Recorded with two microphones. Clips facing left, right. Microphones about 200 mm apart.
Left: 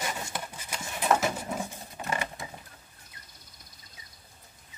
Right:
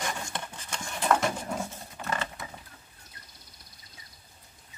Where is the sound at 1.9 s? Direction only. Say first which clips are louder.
Left 1 dB; 15° left (ahead or behind).